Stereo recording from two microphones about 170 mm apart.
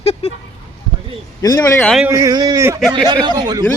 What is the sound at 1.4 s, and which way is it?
Speech, 20° left (ahead or behind).